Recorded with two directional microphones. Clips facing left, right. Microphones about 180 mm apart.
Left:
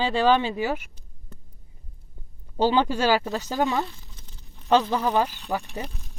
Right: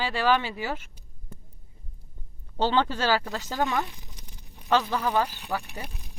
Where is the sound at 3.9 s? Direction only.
15° right (ahead or behind).